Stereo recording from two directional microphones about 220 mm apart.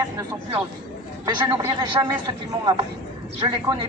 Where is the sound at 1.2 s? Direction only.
20° right (ahead or behind).